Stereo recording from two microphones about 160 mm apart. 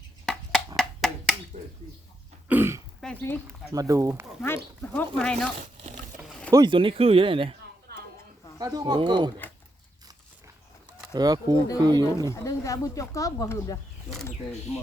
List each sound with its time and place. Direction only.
0.8 s a sound: centre (ahead or behind)
2.5 s throat clearing: 15° right (ahead or behind)
3.0 s speech: 10° left (ahead or behind)
3.4 s speech: 20° right (ahead or behind)
4.4 s speech: 15° left (ahead or behind)
6.2 s a sound: centre (ahead or behind)
6.5 s speech: 30° right (ahead or behind)
7.9 s a sound: 85° right
8.5 s speech: 25° right (ahead or behind)
11.1 s speech: 25° right (ahead or behind)
12.3 s speech: 20° left (ahead or behind)